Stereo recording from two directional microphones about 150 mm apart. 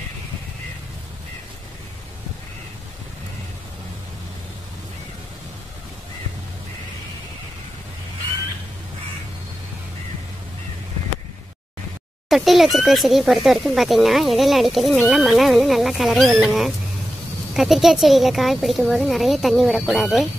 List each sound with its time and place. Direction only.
12.3 s speech: centre (ahead or behind)